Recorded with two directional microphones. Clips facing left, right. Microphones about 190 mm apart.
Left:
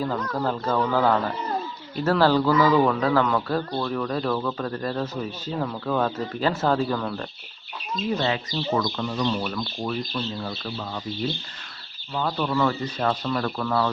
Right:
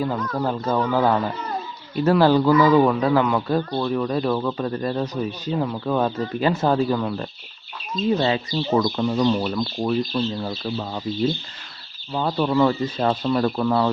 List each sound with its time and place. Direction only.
0.0 s speech: 10° right (ahead or behind)
8.2 s speech: 25° right (ahead or behind)
12.1 s speech: 25° right (ahead or behind)